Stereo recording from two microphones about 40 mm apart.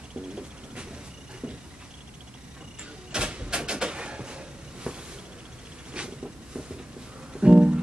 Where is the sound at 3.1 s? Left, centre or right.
Right.